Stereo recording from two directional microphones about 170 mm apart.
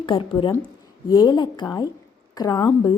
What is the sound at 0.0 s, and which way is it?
A woman's voice, 30° left (ahead or behind).